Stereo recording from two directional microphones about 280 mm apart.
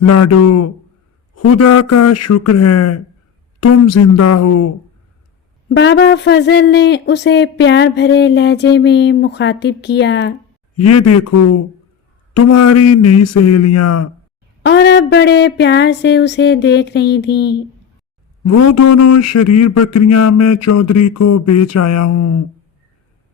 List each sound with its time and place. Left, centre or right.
0.0 s speech: left
5.6 s speech: left
10.8 s speech: left
14.6 s speech: left
18.4 s speech: left